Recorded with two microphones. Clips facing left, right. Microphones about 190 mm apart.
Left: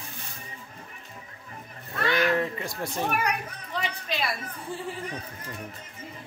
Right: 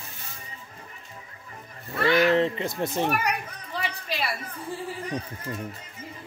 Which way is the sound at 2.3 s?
25° right (ahead or behind).